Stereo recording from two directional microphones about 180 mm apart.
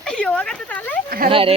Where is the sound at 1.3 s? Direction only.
30° right (ahead or behind).